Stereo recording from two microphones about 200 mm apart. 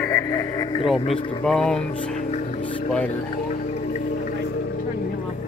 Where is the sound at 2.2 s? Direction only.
35° left (ahead or behind).